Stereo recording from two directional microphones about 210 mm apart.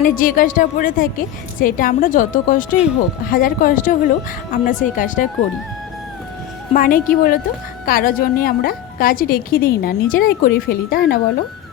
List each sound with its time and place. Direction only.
0.0 s a woman's voice: 40° left (ahead or behind)
6.7 s a woman's voice: 40° left (ahead or behind)